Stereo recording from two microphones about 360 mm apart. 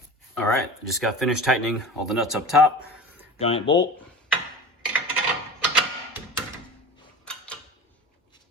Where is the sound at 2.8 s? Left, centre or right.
Centre.